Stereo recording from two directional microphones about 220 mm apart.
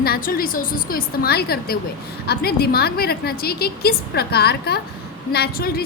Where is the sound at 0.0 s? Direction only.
40° left (ahead or behind).